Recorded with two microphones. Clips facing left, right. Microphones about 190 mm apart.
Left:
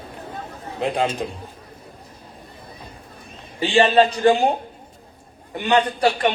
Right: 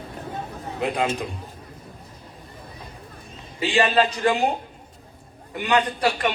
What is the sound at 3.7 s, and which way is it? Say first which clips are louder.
Speech: left 4 dB; 30° left (ahead or behind).